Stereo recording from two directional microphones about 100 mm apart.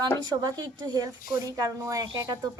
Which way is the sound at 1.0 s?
35° right (ahead or behind).